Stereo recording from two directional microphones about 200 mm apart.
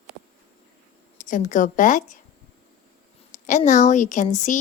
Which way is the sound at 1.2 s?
40° left (ahead or behind).